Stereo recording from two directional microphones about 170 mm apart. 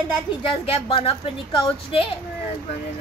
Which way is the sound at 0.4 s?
30° left (ahead or behind).